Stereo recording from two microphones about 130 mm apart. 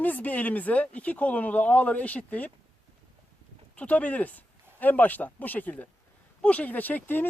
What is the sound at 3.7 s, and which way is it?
A man's voice, 10° left (ahead or behind).